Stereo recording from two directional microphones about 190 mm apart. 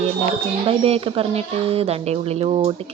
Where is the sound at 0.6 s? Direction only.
30° right (ahead or behind).